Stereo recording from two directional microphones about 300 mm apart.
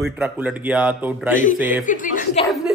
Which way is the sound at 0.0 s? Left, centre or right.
Centre.